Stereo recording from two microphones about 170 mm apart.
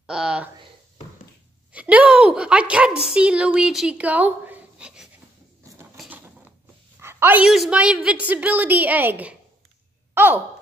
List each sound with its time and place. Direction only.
0.0 s speech: 5° right (ahead or behind)
1.7 s a woman's voice: 10° right (ahead or behind)
5.9 s mechanisms: 10° right (ahead or behind)
7.0 s a woman's voice: 15° right (ahead or behind)